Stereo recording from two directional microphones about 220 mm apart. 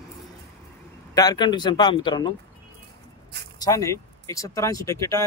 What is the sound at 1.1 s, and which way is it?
Speech, 20° left (ahead or behind).